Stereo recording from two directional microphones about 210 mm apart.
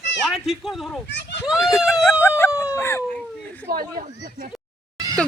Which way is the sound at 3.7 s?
45° right (ahead or behind).